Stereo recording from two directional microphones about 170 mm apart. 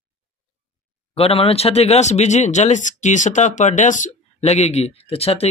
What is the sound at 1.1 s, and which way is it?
Speech, 35° left (ahead or behind).